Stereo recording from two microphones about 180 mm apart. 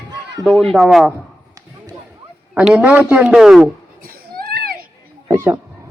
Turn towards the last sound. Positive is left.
turn(degrees=-15)  # may be behind; listen again after turning